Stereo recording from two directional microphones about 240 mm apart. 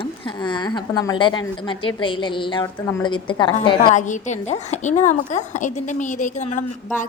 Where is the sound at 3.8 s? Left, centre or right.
Left.